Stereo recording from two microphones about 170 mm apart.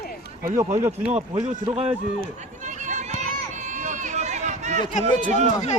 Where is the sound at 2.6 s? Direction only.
45° right (ahead or behind).